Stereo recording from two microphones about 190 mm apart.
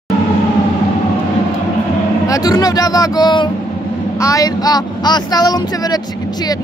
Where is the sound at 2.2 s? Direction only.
20° left (ahead or behind).